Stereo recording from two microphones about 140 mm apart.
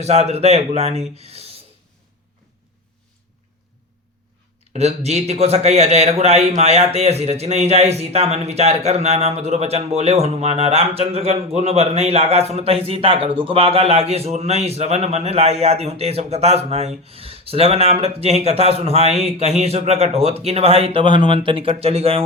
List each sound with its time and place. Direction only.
0.0 s a man's voice: 50° right (ahead or behind)
4.7 s a man's voice: 50° right (ahead or behind)